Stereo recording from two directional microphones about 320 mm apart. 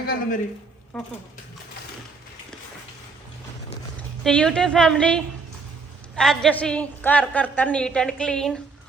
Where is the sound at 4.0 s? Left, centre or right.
Centre.